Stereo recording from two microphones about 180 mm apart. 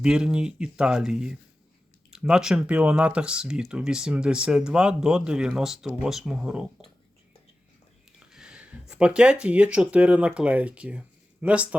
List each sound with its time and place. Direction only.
0.0 s speech: 5° right (ahead or behind)
8.2 s speech: 5° right (ahead or behind)